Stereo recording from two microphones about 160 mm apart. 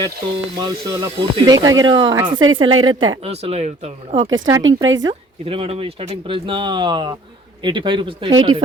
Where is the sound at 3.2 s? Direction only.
40° right (ahead or behind).